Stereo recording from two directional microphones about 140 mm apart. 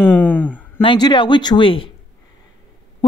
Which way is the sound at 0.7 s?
35° left (ahead or behind).